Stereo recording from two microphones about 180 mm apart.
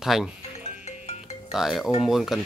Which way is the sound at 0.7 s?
35° left (ahead or behind).